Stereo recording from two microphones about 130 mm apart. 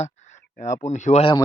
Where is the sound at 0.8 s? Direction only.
65° left (ahead or behind).